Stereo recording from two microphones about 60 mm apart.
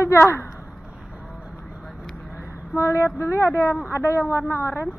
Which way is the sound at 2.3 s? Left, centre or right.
Left.